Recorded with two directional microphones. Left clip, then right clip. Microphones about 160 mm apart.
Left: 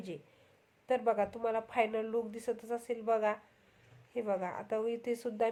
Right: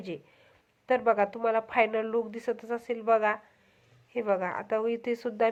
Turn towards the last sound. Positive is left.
turn(degrees=-20)  # may be behind; listen again after turning